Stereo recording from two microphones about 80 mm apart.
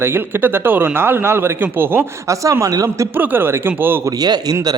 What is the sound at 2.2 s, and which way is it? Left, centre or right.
Speech, right.